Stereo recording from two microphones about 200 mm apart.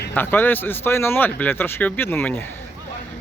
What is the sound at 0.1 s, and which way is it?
Speech, 10° left (ahead or behind).